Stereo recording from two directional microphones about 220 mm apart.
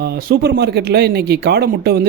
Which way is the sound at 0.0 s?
45° right (ahead or behind).